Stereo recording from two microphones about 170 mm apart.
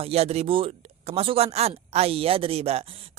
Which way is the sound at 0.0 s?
35° right (ahead or behind).